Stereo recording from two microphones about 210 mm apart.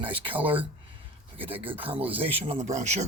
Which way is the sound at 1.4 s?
25° right (ahead or behind).